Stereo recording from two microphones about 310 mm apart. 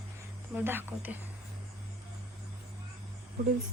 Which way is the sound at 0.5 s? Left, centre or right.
Centre.